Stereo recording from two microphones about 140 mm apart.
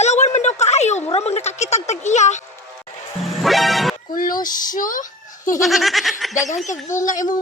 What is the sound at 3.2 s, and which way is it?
Music, centre (ahead or behind).